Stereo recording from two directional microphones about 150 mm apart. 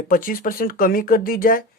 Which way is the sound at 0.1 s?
70° left (ahead or behind).